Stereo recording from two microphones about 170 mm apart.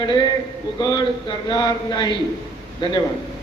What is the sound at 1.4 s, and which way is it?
Speech, 25° left (ahead or behind).